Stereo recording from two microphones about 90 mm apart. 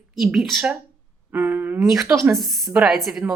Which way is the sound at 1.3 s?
20° right (ahead or behind).